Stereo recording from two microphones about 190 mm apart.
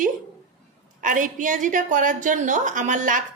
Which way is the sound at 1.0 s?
45° right (ahead or behind).